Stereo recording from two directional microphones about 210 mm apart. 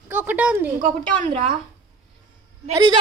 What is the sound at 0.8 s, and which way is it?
Speech, 35° right (ahead or behind).